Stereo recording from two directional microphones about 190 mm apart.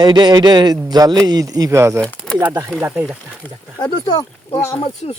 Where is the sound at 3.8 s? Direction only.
25° left (ahead or behind).